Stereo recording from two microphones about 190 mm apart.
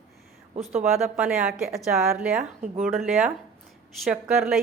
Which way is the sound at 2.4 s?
40° right (ahead or behind).